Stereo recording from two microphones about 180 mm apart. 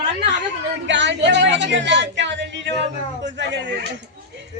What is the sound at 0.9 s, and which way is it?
Speech, 85° right.